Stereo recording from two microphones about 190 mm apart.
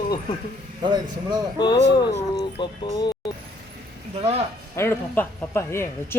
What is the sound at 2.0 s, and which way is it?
Speech, 20° left (ahead or behind).